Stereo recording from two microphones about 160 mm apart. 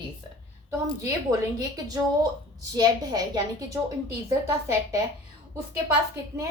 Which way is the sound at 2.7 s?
25° right (ahead or behind).